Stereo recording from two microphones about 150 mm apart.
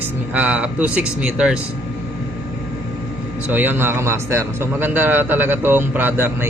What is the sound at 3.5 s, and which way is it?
A man's voice, 10° right (ahead or behind).